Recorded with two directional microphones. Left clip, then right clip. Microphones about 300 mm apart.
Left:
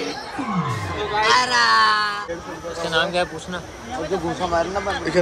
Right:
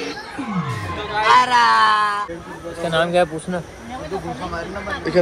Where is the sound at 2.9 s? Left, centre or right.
Right.